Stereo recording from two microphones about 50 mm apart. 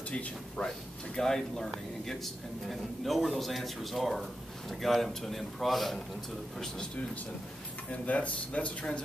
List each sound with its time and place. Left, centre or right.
0.1 s speech: left
0.7 s speech: centre
7.9 s speech: left